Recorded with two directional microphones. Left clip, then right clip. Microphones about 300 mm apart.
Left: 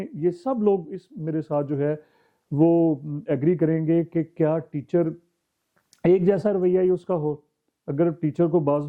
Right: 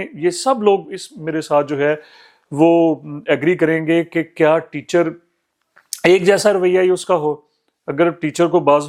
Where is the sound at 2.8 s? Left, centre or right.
Right.